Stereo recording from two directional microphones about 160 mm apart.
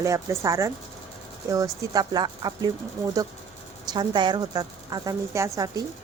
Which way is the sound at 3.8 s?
25° right (ahead or behind).